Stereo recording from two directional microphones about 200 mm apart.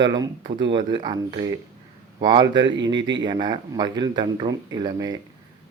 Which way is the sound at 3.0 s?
65° right (ahead or behind).